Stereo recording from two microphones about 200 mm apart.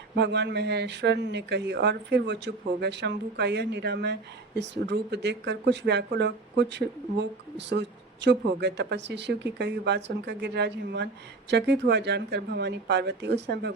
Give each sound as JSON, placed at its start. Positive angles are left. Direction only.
{"t": 0.2, "sound": "speech", "side_deg": -55}